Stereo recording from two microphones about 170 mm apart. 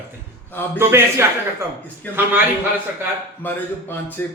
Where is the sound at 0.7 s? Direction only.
15° right (ahead or behind).